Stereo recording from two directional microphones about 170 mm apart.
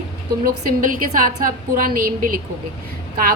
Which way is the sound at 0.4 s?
55° right (ahead or behind).